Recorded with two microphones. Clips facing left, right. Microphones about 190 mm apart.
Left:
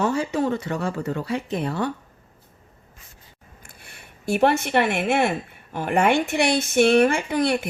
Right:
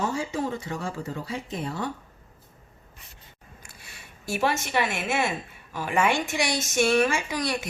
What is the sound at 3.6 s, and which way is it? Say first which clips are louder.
Speech: left 4 dB; 55° left (ahead or behind).